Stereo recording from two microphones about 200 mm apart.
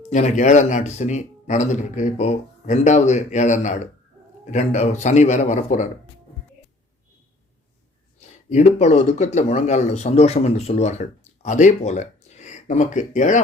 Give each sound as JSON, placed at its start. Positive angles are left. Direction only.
{"t": 0.1, "sound": "speech", "side_deg": 35}
{"t": 8.4, "sound": "speech", "side_deg": 35}